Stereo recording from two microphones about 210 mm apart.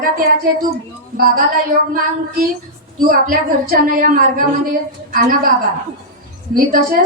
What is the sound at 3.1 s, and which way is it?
A woman's voice, 40° right (ahead or behind).